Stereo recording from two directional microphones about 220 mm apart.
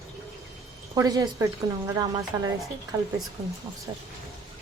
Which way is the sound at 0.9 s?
15° right (ahead or behind).